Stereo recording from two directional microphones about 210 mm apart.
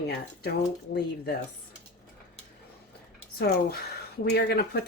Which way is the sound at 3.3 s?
50° left (ahead or behind).